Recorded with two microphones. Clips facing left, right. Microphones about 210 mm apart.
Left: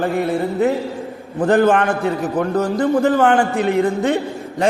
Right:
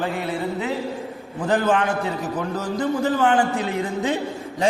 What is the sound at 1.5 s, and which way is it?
A man's voice, 55° left (ahead or behind).